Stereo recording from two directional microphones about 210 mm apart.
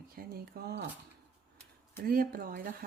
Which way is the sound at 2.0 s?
45° right (ahead or behind).